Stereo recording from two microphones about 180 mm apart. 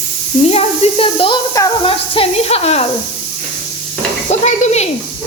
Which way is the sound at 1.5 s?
20° left (ahead or behind).